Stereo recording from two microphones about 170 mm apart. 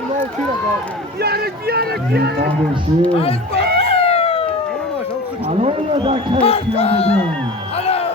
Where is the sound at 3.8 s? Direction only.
35° left (ahead or behind).